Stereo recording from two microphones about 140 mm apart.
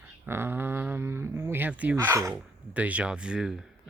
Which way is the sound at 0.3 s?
15° right (ahead or behind).